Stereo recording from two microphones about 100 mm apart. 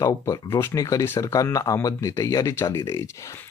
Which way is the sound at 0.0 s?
35° left (ahead or behind).